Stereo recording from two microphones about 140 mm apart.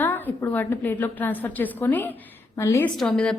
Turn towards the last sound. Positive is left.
turn(degrees=5)  # may be behind; listen again after turning